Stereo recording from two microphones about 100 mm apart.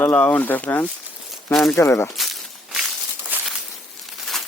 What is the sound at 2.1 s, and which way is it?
Walk, centre (ahead or behind).